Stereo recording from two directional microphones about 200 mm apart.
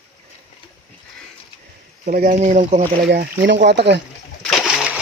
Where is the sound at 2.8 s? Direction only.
50° right (ahead or behind).